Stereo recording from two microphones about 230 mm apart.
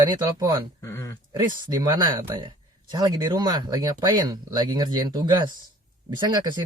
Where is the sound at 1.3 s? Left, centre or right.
Centre.